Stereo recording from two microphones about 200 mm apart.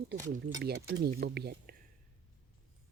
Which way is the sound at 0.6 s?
50° right (ahead or behind).